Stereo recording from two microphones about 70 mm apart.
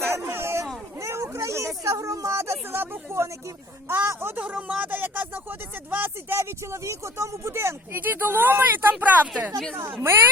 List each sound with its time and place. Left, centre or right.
0.1 s a sound: right
0.9 s speech: right
4.4 s speech: centre
9.7 s speech: right